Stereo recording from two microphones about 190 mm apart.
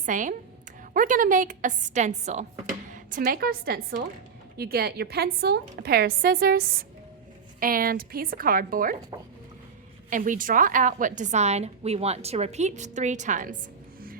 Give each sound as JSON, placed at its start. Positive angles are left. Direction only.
{"t": 0.0, "sound": "a woman's voice", "side_deg": -40}
{"t": 10.1, "sound": "a woman's voice", "side_deg": -45}